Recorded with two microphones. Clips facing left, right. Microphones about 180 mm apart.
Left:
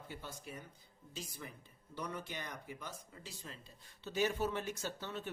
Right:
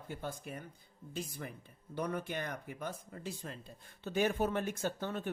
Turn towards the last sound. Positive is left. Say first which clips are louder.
# right 6 dB
turn(degrees=-50)  # may be behind; listen again after turning